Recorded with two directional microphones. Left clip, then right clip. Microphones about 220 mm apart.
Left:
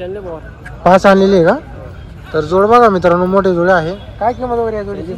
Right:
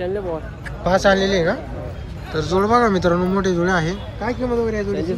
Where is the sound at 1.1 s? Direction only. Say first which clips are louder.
Left 9 dB; 5° left (ahead or behind).